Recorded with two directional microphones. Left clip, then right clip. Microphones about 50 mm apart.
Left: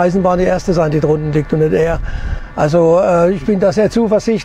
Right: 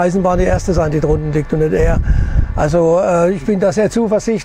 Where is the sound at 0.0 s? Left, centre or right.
Centre.